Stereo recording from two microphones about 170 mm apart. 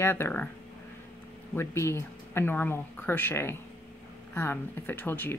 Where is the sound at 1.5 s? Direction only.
15° left (ahead or behind).